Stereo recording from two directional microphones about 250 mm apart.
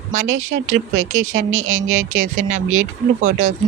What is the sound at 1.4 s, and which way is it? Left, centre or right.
Speech, right.